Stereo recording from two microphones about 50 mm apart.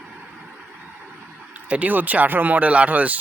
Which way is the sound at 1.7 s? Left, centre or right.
Right.